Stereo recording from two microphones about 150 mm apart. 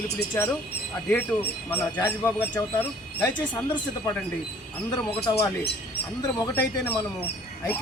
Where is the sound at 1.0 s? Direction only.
10° left (ahead or behind).